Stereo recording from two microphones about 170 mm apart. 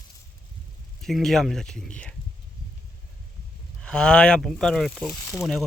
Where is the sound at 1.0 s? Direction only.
Centre (ahead or behind).